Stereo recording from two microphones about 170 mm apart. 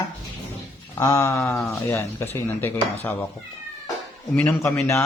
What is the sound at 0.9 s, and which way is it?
Speech, 15° left (ahead or behind).